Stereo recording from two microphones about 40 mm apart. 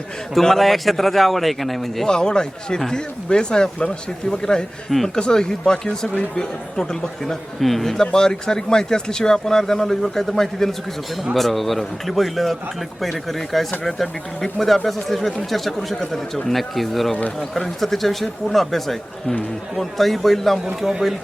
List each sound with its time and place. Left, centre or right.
0.3 s speech: centre
2.0 s speech: centre
7.6 s speech: centre
8.0 s speech: centre